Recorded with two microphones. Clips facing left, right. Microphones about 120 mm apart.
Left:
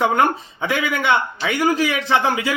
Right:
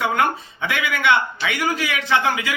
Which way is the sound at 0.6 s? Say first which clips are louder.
Left 1 dB; 35° left (ahead or behind).